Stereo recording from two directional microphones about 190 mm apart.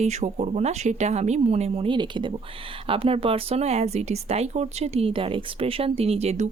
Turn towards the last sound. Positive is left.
turn(degrees=-35)  # may be behind; listen again after turning